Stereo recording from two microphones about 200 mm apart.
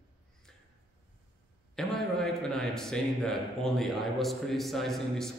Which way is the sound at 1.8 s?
Centre (ahead or behind).